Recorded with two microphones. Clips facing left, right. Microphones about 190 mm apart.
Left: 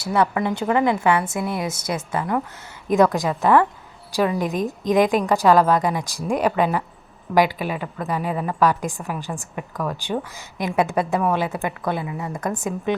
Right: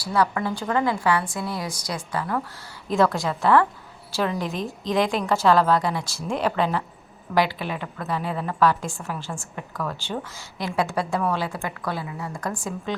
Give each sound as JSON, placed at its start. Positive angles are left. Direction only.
{"t": 0.0, "sound": "a woman's voice", "side_deg": 25}